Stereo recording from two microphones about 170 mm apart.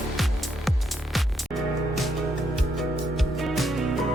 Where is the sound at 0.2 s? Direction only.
Centre (ahead or behind).